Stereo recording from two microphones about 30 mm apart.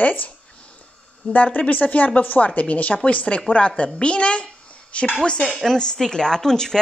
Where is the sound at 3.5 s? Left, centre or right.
Left.